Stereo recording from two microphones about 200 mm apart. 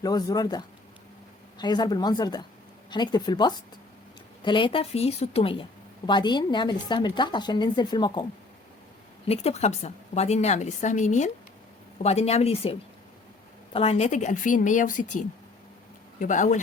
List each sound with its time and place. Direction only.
0.0 s speech: 20° left (ahead or behind)
9.2 s a woman's voice: 30° left (ahead or behind)
13.7 s a woman's voice: 30° left (ahead or behind)